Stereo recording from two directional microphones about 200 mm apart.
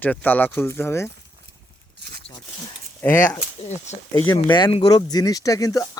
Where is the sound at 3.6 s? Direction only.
35° left (ahead or behind).